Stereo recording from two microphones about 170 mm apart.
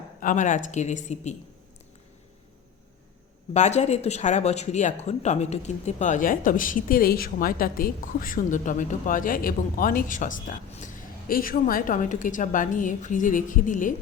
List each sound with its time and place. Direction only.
0.2 s speech: 50° left (ahead or behind)
3.5 s speech: 40° left (ahead or behind)